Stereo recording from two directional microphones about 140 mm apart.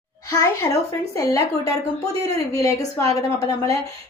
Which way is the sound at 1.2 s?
25° left (ahead or behind).